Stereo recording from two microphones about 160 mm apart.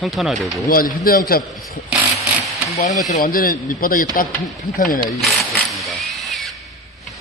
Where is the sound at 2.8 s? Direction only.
50° left (ahead or behind).